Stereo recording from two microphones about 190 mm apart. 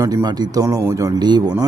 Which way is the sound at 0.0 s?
20° right (ahead or behind).